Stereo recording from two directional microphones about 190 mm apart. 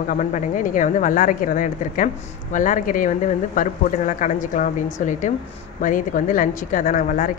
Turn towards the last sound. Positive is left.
turn(degrees=45)  # may be behind; listen again after turning